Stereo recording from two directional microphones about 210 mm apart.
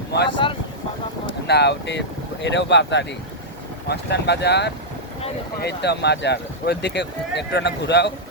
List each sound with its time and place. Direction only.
0.4 s boat: 25° left (ahead or behind)
1.5 s speech: 50° left (ahead or behind)